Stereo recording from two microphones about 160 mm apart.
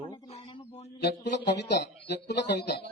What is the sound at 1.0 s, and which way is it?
A man's voice, 90° left.